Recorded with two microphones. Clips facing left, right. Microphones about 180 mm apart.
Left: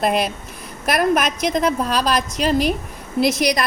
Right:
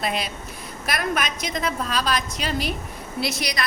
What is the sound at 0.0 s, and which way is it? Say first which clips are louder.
Speech: left 8 dB; 50° left (ahead or behind).